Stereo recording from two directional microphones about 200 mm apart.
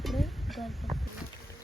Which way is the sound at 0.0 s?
Centre (ahead or behind).